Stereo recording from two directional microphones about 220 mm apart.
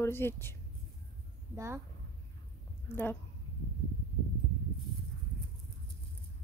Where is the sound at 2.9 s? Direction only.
10° left (ahead or behind).